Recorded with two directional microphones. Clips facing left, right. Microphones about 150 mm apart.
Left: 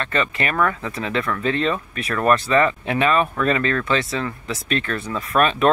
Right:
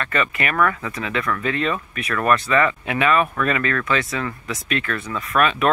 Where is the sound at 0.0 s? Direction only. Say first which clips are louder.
Even; 30° left (ahead or behind).